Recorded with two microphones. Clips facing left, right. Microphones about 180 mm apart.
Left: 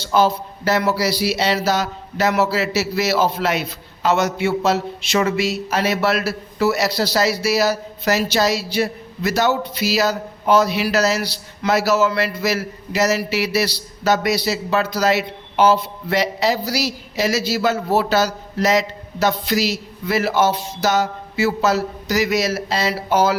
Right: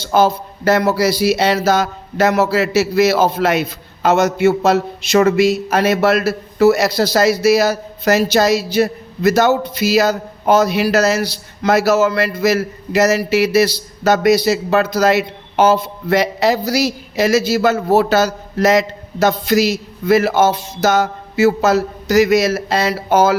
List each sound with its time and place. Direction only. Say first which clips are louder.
0.0 s speech: right 3 dB; 45° right (ahead or behind)